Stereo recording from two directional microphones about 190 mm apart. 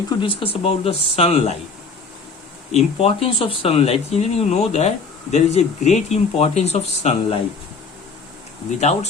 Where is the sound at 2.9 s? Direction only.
30° left (ahead or behind).